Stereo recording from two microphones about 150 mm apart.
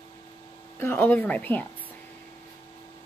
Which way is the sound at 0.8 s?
15° left (ahead or behind).